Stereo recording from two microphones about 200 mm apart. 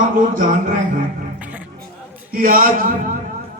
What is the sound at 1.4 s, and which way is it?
Music, 10° right (ahead or behind).